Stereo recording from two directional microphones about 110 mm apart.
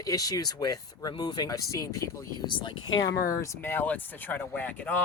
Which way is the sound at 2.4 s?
45° left (ahead or behind).